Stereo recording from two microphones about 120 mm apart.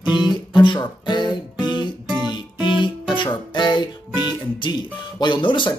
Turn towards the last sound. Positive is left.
turn(degrees=40)  # may be behind; listen again after turning